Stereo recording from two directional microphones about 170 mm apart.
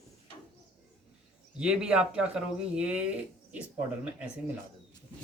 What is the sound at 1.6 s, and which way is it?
Speech, 5° right (ahead or behind).